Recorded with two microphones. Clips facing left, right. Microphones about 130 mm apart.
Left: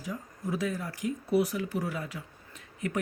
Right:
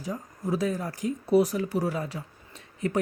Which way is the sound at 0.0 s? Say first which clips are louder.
Right 4 dB; 35° right (ahead or behind).